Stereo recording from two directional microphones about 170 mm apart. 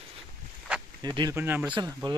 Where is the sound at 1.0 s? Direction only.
25° right (ahead or behind).